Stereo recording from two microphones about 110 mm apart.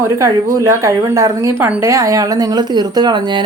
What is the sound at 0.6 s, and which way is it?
A woman's voice, 30° right (ahead or behind).